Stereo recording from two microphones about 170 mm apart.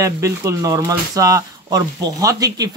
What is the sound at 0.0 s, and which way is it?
Speech, 15° right (ahead or behind).